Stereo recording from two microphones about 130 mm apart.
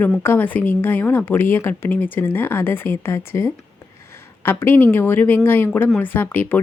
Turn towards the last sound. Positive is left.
turn(degrees=15)  # may be behind; listen again after turning